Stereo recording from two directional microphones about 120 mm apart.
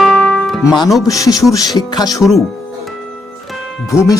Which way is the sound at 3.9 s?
25° left (ahead or behind).